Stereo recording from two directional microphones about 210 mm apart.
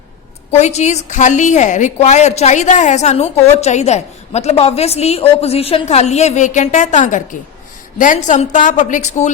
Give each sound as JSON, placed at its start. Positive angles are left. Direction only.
{"t": 0.5, "sound": "a woman's voice", "side_deg": 30}